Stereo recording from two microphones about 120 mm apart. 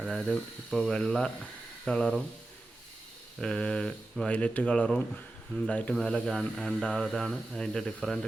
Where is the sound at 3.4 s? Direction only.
10° left (ahead or behind).